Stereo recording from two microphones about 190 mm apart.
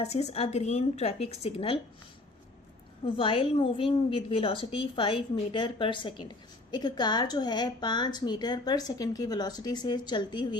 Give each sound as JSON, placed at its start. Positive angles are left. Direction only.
{"t": 0.0, "sound": "a woman's voice", "side_deg": 35}
{"t": 3.2, "sound": "a woman's voice", "side_deg": 25}